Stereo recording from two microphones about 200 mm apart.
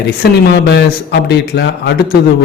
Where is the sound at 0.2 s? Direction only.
60° left (ahead or behind).